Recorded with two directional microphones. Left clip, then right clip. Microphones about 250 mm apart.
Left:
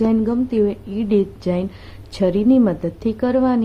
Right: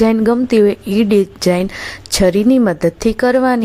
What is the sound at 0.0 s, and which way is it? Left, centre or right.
A woman's voice, right.